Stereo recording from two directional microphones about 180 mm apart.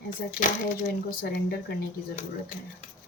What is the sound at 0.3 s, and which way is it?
Speech, 50° left (ahead or behind).